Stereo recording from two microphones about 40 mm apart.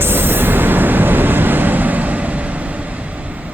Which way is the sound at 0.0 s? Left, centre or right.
Right.